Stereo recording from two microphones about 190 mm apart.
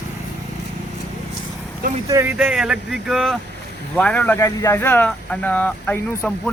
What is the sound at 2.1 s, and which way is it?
Speech, 10° right (ahead or behind).